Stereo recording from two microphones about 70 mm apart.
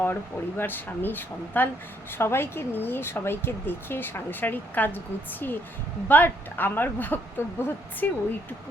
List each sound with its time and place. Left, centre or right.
0.0 s speech: left